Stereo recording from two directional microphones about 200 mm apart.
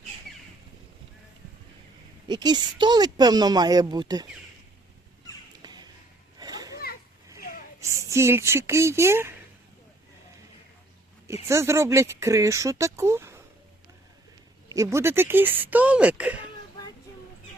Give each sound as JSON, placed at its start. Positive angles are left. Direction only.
{"t": 2.2, "sound": "speech", "side_deg": -20}
{"t": 5.6, "sound": "a sound", "side_deg": -20}
{"t": 6.4, "sound": "children playing", "side_deg": -20}
{"t": 7.3, "sound": "a sound", "side_deg": 45}
{"t": 7.8, "sound": "speech", "side_deg": -15}
{"t": 11.4, "sound": "speech", "side_deg": -15}
{"t": 14.7, "sound": "speech", "side_deg": -15}